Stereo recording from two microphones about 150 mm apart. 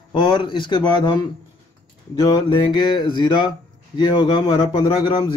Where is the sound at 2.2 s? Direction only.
25° left (ahead or behind).